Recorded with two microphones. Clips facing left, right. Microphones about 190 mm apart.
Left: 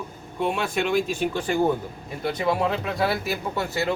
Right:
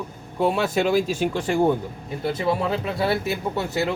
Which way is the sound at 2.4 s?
30° right (ahead or behind).